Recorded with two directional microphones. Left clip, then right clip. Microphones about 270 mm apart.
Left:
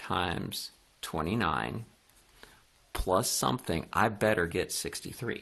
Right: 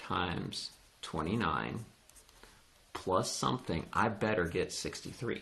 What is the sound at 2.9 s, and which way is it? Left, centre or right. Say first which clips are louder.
Speech: left 4 dB; left.